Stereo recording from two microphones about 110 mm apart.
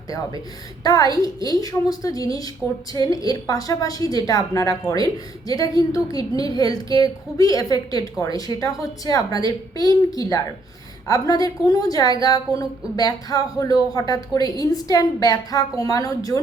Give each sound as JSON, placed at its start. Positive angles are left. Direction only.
{"t": 0.9, "sound": "a woman's voice", "side_deg": 35}